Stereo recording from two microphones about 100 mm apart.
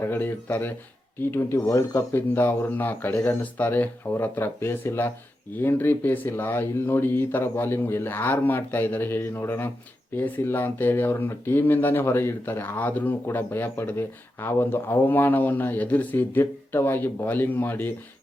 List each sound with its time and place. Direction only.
0.0 s speech: 20° left (ahead or behind)